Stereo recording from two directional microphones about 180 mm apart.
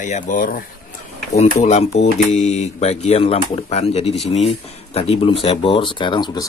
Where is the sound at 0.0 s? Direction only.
45° left (ahead or behind).